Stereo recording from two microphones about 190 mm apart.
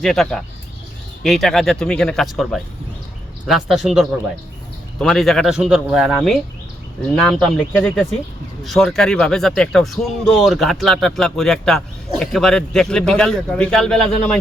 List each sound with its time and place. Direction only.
0.0 s speech: centre (ahead or behind)